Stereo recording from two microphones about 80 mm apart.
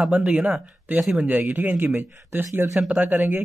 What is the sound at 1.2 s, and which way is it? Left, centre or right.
Speech, right.